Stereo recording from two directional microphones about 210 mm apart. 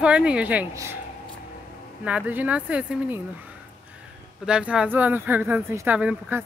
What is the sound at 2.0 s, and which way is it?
Speech, 5° right (ahead or behind).